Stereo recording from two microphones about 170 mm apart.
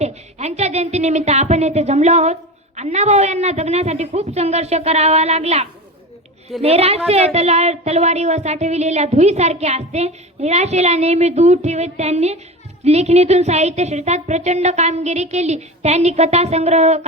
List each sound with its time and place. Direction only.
0.0 s a woman's voice: 40° right (ahead or behind)